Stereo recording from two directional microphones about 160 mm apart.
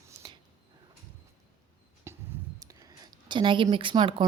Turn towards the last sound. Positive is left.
turn(degrees=-30)  # may be behind; listen again after turning